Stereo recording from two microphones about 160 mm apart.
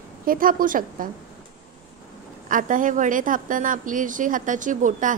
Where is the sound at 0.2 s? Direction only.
60° right (ahead or behind).